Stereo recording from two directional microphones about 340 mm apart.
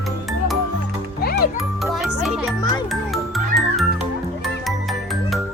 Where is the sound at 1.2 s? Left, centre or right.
Left.